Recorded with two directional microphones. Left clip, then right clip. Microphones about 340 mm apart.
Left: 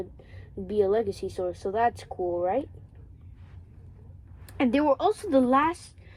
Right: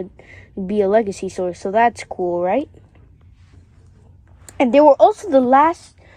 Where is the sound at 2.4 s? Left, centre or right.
Right.